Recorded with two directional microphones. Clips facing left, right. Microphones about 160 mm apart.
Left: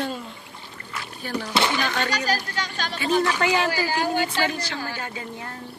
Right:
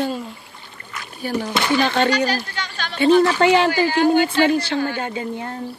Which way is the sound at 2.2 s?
40° left (ahead or behind).